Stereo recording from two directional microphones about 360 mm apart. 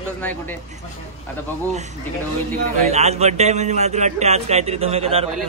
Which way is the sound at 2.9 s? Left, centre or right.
Centre.